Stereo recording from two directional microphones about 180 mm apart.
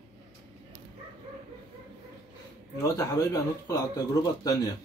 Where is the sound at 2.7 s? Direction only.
20° left (ahead or behind).